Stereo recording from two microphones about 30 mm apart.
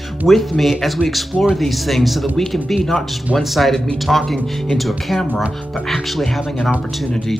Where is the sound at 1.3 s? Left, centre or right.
Right.